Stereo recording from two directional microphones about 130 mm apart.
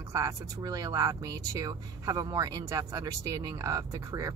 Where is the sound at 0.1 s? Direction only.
25° right (ahead or behind).